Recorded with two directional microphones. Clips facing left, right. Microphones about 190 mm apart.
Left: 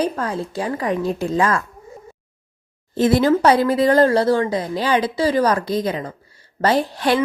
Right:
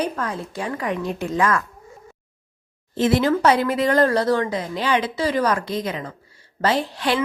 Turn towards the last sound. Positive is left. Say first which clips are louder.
# left 4 dB
turn(degrees=40)  # may be behind; listen again after turning